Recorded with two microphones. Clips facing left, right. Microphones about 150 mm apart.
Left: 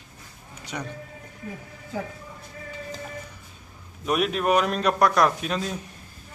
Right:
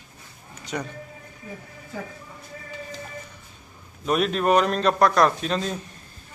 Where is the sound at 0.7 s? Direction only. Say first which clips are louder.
Right 3 dB; 5° left (ahead or behind).